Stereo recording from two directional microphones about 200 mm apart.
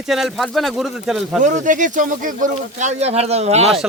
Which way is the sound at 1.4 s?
40° right (ahead or behind).